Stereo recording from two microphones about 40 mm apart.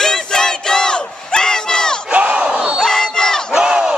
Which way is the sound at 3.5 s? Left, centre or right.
Centre.